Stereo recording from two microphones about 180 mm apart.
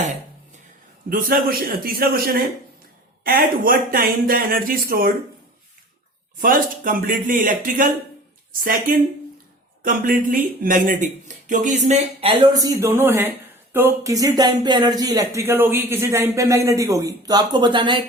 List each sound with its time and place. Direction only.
1.1 s a man's voice: 55° right (ahead or behind)
6.4 s speech: 50° right (ahead or behind)
9.8 s speech: 50° right (ahead or behind)
12.4 s speech: 25° right (ahead or behind)